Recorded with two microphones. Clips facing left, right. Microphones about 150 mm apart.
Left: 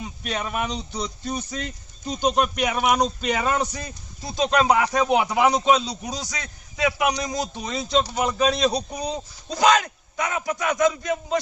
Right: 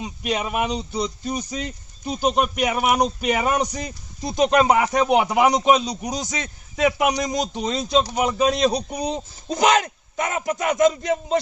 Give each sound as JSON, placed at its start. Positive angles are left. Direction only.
{"t": 0.0, "sound": "a man's voice", "side_deg": -15}
{"t": 5.3, "sound": "a man's voice", "side_deg": -20}